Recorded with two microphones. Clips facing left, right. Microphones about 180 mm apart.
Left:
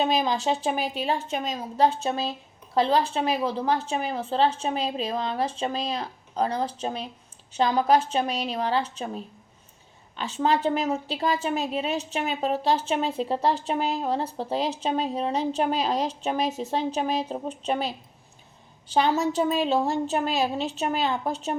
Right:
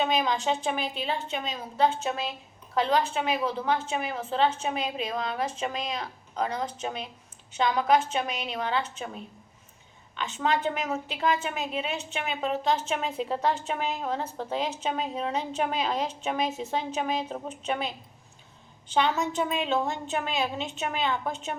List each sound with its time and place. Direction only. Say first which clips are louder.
0.0 s a woman's voice: left 2 dB; 35° left (ahead or behind)
18.9 s a woman's voice: left 3 dB; 35° left (ahead or behind)